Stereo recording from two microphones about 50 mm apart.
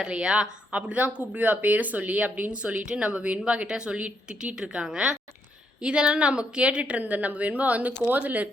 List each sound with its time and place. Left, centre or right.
0.0 s speech: centre
4.6 s a woman's voice: centre; by 8.4 s right